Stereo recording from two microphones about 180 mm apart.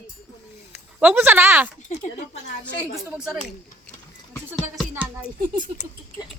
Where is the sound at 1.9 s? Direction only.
45° left (ahead or behind).